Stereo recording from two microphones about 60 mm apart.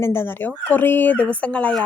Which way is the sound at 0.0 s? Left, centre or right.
Left.